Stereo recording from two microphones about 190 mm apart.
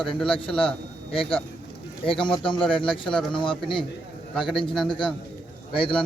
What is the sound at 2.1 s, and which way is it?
Speech, 25° left (ahead or behind).